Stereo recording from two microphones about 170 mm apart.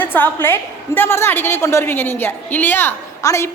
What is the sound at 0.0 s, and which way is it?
A woman's voice, 10° left (ahead or behind).